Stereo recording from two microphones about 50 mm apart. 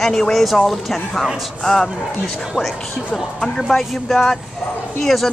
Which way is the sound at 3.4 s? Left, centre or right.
Centre.